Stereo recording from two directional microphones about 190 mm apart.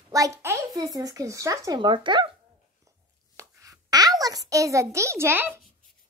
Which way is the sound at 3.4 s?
15° right (ahead or behind).